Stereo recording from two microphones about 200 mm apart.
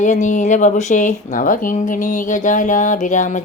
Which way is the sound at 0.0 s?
40° left (ahead or behind).